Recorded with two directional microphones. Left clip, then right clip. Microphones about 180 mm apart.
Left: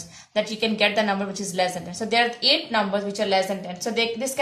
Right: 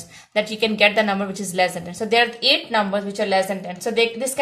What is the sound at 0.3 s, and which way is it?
A woman's voice, 40° right (ahead or behind).